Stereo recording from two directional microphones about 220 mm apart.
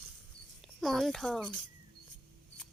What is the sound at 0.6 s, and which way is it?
A child's voice, centre (ahead or behind).